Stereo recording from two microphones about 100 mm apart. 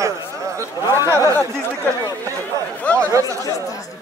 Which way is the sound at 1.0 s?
30° right (ahead or behind).